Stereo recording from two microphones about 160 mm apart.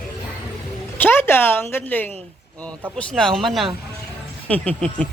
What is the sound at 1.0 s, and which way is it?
A woman's voice, 15° left (ahead or behind).